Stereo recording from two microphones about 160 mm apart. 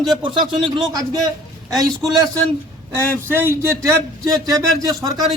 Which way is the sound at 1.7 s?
Centre (ahead or behind).